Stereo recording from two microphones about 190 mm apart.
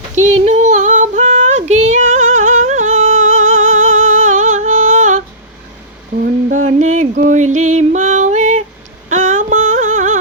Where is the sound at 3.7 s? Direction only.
90° right.